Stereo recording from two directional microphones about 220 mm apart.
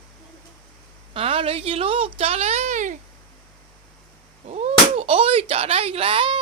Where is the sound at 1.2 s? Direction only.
25° right (ahead or behind).